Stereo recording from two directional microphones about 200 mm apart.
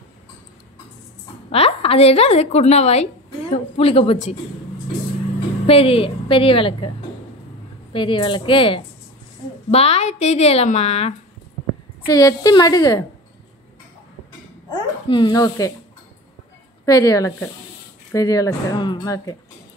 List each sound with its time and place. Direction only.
1.5 s a woman's voice: 30° left (ahead or behind)
5.7 s a woman's voice: 30° left (ahead or behind)
7.9 s a woman's voice: 25° left (ahead or behind)
12.1 s a woman's voice: 20° left (ahead or behind)
14.7 s a child's voice: 25° left (ahead or behind)
16.8 s speech: 20° left (ahead or behind)